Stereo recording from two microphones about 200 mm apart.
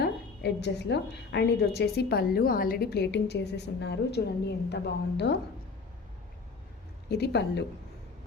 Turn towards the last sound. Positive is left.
turn(degrees=55)  # may be behind; listen again after turning